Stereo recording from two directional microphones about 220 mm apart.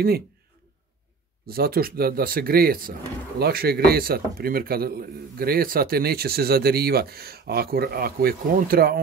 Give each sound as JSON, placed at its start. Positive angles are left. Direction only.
{"t": 1.5, "sound": "a man's voice", "side_deg": -45}